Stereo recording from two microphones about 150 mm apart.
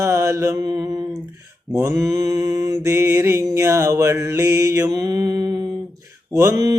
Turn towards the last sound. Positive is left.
turn(degrees=-25)  # may be behind; listen again after turning